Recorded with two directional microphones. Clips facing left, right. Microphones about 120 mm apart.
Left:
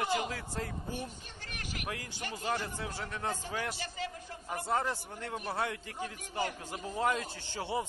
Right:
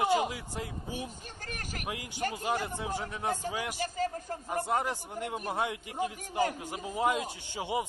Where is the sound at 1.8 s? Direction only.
15° right (ahead or behind).